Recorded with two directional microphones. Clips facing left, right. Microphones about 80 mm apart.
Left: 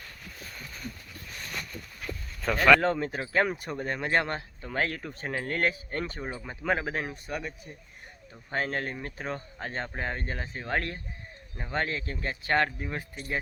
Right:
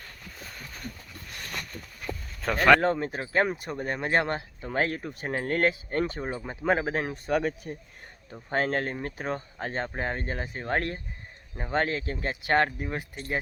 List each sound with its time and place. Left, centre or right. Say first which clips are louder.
2.5 s speech: right 1 dB; right
2.8 s speech: right 1 dB; centre
3.8 s speech: right 2 dB; centre
5.3 s speech: right 3 dB; right
7.3 s speech: right 12 dB; right
8.5 s speech: right 4 dB; right
12.1 s speech: right 2 dB; right